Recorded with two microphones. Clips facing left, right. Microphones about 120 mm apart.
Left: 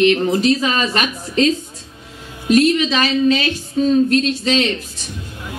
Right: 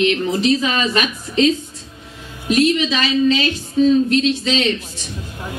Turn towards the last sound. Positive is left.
turn(degrees=45)  # may be behind; listen again after turning